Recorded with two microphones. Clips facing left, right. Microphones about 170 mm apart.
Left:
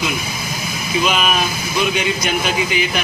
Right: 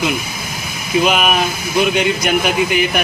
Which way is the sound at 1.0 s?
55° right (ahead or behind).